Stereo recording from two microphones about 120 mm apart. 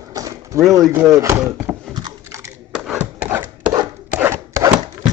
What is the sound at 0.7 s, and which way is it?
Speech, 25° right (ahead or behind).